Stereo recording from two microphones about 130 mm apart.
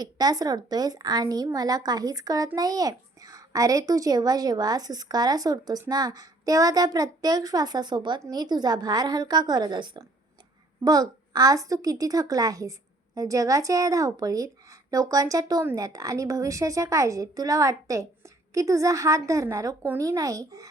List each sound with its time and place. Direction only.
0.0 s a child's voice: 30° right (ahead or behind)